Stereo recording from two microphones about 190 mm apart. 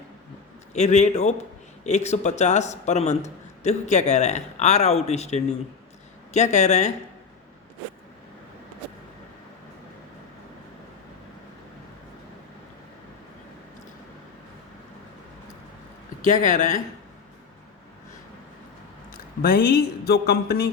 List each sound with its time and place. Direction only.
0.7 s speech: 35° left (ahead or behind)
16.2 s speech: 40° left (ahead or behind)
19.4 s speech: 50° left (ahead or behind)